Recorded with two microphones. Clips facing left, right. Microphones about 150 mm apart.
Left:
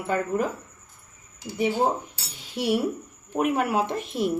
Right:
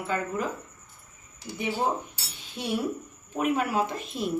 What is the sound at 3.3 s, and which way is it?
Speech, 60° left (ahead or behind).